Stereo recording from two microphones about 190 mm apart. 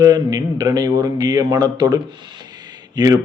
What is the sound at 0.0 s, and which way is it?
Speech, 20° right (ahead or behind).